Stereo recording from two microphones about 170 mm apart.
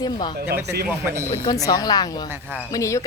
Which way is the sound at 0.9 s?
15° right (ahead or behind).